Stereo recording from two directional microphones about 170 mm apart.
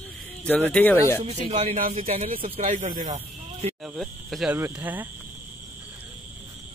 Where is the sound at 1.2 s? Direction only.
35° right (ahead or behind).